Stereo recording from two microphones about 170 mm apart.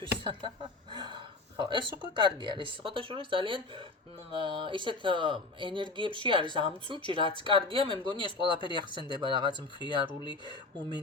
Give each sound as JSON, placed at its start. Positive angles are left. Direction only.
{"t": 0.0, "sound": "speech", "side_deg": -30}